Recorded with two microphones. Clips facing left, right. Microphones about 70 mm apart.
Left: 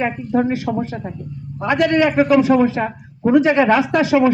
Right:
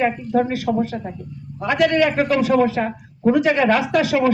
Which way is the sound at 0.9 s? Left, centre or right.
Centre.